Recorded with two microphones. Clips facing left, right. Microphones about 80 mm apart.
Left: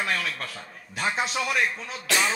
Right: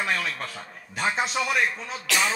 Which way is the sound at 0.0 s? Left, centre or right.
Centre.